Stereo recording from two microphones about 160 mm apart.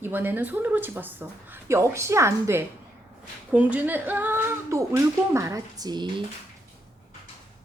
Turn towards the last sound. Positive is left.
turn(degrees=-25)  # may be behind; listen again after turning